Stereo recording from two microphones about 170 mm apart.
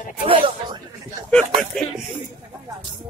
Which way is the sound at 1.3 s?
5° left (ahead or behind).